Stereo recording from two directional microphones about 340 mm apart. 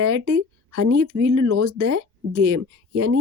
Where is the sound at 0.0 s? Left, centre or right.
Right.